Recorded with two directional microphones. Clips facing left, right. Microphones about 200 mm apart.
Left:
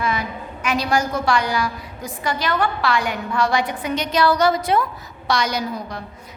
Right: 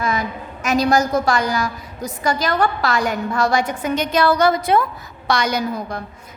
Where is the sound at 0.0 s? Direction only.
45° right (ahead or behind).